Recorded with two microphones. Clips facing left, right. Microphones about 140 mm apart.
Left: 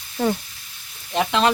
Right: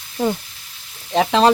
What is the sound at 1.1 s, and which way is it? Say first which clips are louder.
Speech: right 5 dB; 35° right (ahead or behind).